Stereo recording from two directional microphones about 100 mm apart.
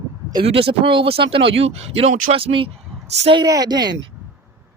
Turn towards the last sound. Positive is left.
turn(degrees=-45)  # may be behind; listen again after turning